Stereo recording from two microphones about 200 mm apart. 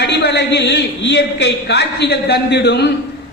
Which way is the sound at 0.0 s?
55° left (ahead or behind).